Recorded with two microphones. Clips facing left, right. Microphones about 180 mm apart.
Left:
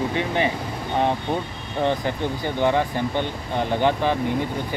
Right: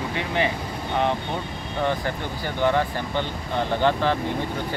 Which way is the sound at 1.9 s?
20° left (ahead or behind).